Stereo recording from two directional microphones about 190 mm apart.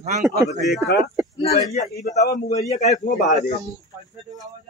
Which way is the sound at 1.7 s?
35° left (ahead or behind).